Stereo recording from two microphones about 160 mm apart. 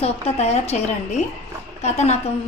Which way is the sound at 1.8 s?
45° left (ahead or behind).